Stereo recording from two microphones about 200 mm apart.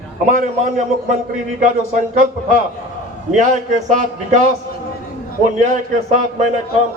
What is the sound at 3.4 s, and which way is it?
A man's voice, 40° right (ahead or behind).